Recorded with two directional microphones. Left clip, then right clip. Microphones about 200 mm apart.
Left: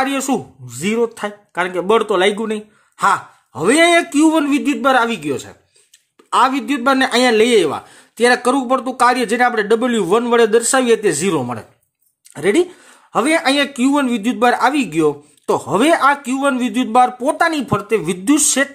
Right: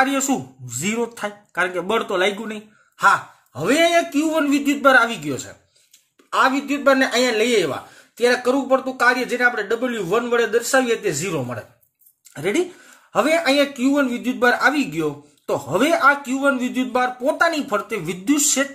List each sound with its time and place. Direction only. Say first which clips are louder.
0.0 s speech: left 1 dB; 30° left (ahead or behind); by 11.6 s 50° left (ahead or behind)
12.4 s speech: left 6 dB; 30° left (ahead or behind)